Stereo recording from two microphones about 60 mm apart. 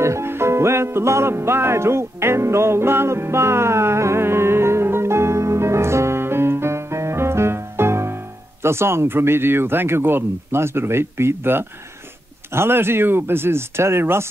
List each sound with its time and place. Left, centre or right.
0.0 s music: right
8.6 s speech: right